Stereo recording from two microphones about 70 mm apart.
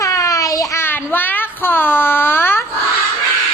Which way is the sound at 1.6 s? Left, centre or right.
Left.